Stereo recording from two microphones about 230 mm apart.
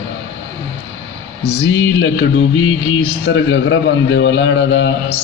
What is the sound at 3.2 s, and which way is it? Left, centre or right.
A man's voice, left.